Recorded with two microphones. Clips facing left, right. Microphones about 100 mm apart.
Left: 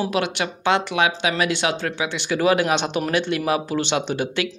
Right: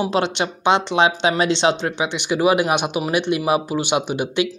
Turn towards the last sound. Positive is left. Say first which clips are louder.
# right 2 dB
turn(degrees=-15)  # may be behind; listen again after turning